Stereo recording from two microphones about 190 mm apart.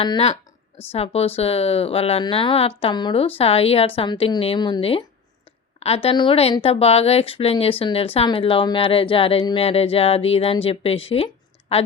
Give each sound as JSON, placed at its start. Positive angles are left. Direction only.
{"t": 0.0, "sound": "a woman's voice", "side_deg": 30}